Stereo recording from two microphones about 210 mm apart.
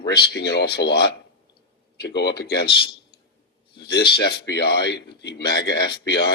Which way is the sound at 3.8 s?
50° left (ahead or behind).